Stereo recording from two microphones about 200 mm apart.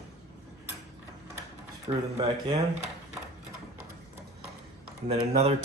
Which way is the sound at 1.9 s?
25° right (ahead or behind).